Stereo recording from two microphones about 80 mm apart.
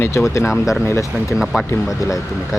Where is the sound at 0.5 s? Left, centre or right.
Centre.